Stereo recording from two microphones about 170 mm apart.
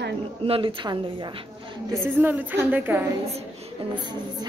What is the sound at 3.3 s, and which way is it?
A woman's voice, 30° right (ahead or behind).